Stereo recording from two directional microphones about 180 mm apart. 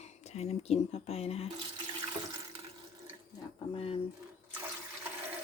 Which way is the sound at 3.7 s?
30° left (ahead or behind).